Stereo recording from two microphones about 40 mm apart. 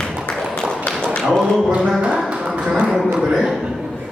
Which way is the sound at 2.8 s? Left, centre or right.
Right.